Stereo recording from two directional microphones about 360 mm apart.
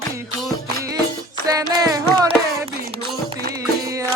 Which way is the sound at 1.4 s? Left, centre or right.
Centre.